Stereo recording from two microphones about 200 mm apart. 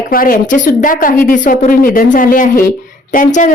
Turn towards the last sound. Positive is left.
turn(degrees=40)  # may be behind; listen again after turning